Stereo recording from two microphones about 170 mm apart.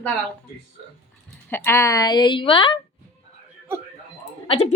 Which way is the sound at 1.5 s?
15° left (ahead or behind).